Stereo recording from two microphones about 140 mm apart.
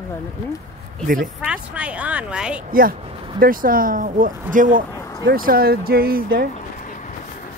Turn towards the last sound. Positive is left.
turn(degrees=-90)